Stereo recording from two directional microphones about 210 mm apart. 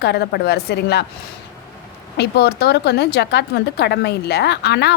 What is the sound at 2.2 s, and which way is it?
A woman's voice, 50° left (ahead or behind).